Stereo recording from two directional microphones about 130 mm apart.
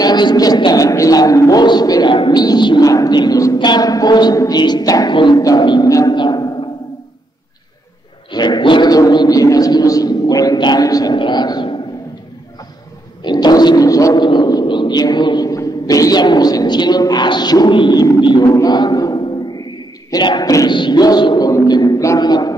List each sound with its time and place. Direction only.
0.0 s a sound: 35° left (ahead or behind)
3.5 s speech: 35° left (ahead or behind)
8.3 s speech: 35° left (ahead or behind)
13.2 s speech: 35° left (ahead or behind)